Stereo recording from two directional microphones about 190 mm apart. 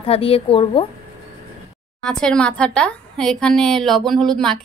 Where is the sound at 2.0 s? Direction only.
5° left (ahead or behind).